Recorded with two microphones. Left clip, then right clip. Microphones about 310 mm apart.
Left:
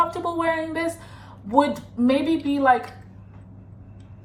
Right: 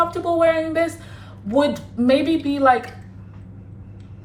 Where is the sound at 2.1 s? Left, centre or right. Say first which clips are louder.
Right 4 dB; centre.